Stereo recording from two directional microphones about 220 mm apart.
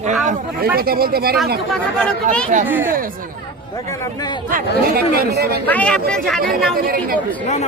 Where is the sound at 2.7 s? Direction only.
10° right (ahead or behind).